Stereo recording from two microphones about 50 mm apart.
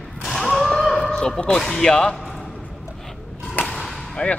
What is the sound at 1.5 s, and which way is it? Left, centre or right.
Speech, centre.